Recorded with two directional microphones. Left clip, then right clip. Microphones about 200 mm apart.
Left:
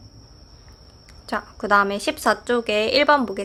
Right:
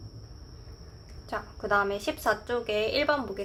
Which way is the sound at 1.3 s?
35° left (ahead or behind).